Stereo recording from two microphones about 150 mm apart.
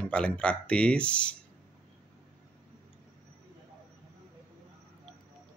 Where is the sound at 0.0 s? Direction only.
5° left (ahead or behind).